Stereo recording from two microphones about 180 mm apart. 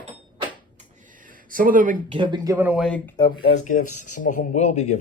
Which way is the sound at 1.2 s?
50° right (ahead or behind).